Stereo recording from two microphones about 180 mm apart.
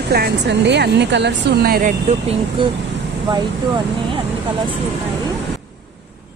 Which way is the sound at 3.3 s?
30° right (ahead or behind).